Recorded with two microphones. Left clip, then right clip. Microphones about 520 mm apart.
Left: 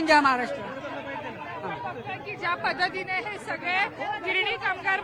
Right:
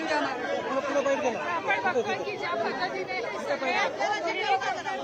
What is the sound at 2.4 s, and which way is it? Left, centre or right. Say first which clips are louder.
Speech: left 6 dB; left.